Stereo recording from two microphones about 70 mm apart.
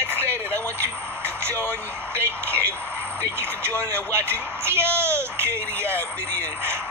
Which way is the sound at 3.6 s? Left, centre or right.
Right.